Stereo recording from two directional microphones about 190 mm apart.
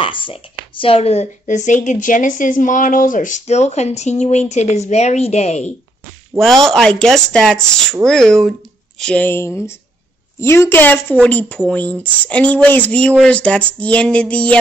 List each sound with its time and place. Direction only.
0.0 s speech: 25° left (ahead or behind)
6.6 s speech: 5° left (ahead or behind)